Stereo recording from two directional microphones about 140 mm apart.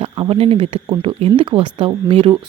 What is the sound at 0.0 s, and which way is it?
Speech, 40° right (ahead or behind).